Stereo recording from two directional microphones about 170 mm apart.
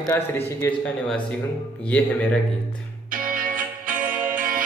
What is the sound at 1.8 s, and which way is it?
Speech, 5° left (ahead or behind).